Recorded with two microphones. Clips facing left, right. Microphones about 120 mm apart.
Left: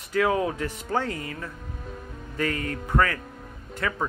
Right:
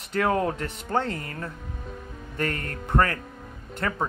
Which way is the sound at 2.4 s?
50° right (ahead or behind).